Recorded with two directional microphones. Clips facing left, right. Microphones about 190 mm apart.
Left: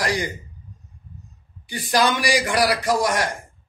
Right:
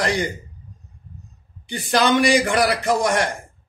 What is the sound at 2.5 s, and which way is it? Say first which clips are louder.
Speech: right 1 dB; 25° right (ahead or behind).